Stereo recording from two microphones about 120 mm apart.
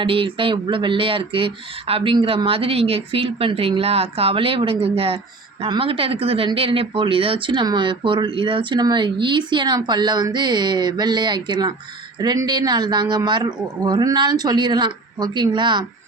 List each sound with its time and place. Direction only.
0.0 s speech: 45° right (ahead or behind)